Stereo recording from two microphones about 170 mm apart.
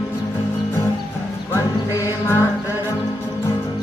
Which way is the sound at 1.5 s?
15° left (ahead or behind).